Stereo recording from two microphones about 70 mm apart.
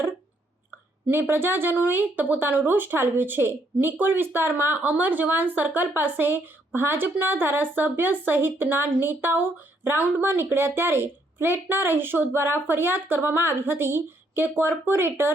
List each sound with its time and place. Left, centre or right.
1.1 s a woman's voice: right